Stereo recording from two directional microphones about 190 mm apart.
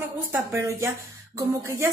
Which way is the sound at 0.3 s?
15° right (ahead or behind).